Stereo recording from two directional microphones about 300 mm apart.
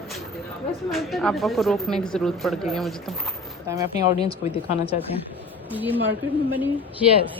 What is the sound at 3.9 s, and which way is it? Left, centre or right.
Speech, left.